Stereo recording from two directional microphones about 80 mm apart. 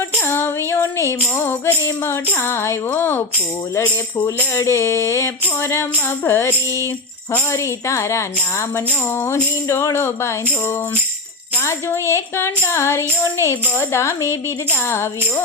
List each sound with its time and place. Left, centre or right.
0.2 s tambourine: left
1.8 s speech: left
4.5 s speech: left